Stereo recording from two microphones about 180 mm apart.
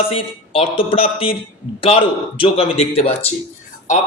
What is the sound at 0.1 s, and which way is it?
A man's voice, 30° left (ahead or behind).